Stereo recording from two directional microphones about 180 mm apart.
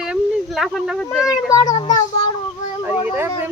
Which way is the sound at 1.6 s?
40° left (ahead or behind).